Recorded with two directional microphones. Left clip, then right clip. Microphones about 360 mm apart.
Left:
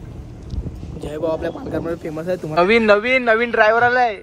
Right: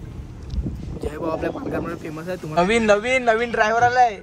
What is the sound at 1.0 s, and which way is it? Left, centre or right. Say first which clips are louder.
Speech: left 3 dB; centre.